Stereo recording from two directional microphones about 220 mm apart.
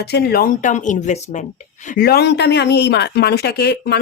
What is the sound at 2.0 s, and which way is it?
Speech, 45° left (ahead or behind).